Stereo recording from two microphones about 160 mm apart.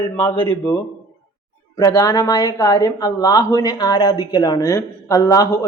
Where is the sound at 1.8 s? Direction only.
20° left (ahead or behind).